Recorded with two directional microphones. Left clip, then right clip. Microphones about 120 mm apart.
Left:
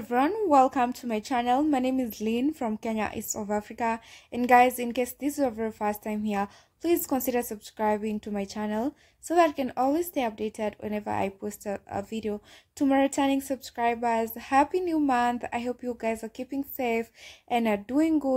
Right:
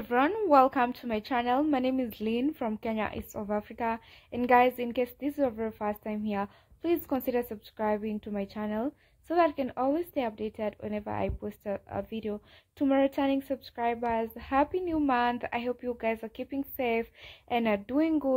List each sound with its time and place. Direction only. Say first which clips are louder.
0.1 s a woman's voice: left 1 dB; 30° left (ahead or behind)